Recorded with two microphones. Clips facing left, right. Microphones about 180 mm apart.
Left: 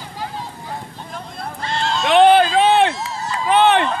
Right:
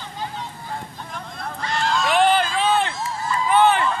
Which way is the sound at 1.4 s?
30° left (ahead or behind).